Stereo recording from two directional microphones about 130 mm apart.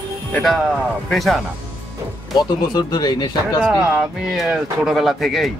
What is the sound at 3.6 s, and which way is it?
Speech, 5° right (ahead or behind).